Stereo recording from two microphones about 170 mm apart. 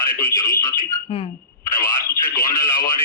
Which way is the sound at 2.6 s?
55° left (ahead or behind).